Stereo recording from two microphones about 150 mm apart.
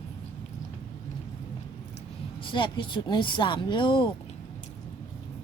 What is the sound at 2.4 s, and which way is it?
Speech, 35° left (ahead or behind).